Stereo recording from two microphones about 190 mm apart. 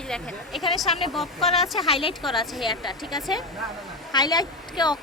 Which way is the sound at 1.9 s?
30° left (ahead or behind).